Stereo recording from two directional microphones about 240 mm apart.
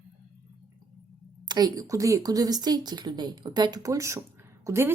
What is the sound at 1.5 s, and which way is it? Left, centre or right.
Speech, centre.